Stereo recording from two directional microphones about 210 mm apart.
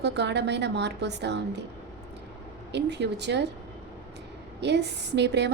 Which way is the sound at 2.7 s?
55° right (ahead or behind).